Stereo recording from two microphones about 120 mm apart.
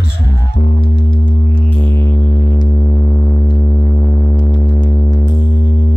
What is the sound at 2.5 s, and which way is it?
Music, 35° left (ahead or behind).